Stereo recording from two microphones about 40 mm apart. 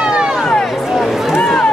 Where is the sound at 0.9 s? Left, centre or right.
Centre.